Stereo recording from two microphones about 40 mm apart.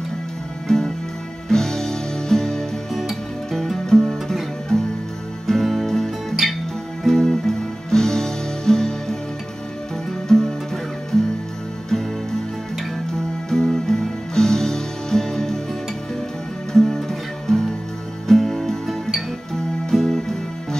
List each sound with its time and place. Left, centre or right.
0.7 s music: centre
2.9 s music: centre
5.5 s music: centre
10.2 s music: centre
13.5 s music: centre
16.7 s music: centre
18.3 s music: centre
19.5 s music: centre